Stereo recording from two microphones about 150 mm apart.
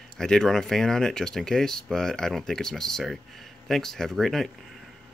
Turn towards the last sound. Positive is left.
turn(degrees=0)  # may be behind; listen again after turning